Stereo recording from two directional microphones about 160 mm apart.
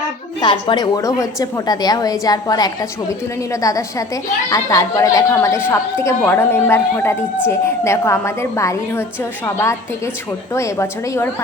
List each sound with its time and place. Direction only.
0.4 s a woman's voice: 30° left (ahead or behind)
10.5 s a woman's voice: 20° left (ahead or behind)